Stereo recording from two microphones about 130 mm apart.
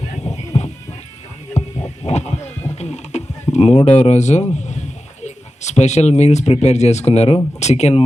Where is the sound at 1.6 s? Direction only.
20° left (ahead or behind).